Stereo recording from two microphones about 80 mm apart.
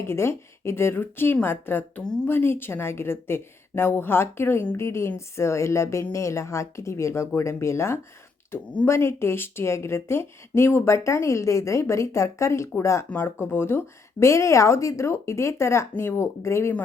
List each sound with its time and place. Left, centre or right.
0.1 s a woman's voice: left
8.5 s speech: centre
8.9 s speech: left